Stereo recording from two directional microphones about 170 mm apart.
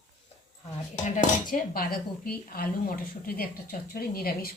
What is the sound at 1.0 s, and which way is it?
Speech, 50° left (ahead or behind).